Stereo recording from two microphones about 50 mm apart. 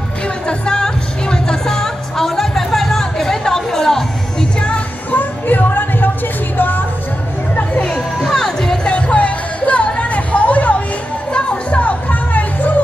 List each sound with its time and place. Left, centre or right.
0.5 s music: centre
5.1 s music: left
8.2 s music: centre
8.8 s music: left